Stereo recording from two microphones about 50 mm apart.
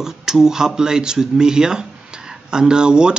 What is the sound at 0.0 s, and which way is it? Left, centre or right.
Speech, centre.